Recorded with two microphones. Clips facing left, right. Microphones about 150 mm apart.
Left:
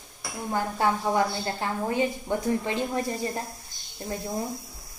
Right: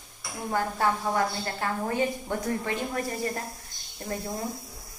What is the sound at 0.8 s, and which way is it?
A woman's voice, 20° left (ahead or behind).